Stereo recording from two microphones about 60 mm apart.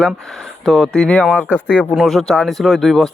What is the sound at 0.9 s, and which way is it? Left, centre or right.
Speech, centre.